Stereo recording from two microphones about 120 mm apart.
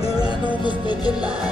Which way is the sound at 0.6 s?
40° left (ahead or behind).